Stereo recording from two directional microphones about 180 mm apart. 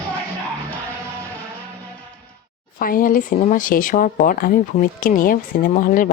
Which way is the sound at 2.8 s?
50° left (ahead or behind).